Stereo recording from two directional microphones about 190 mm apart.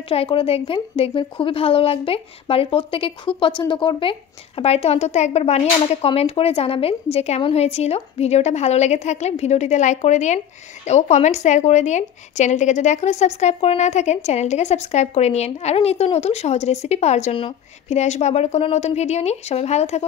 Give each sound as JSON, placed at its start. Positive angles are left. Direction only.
{"t": 0.1, "sound": "a woman's voice", "side_deg": 30}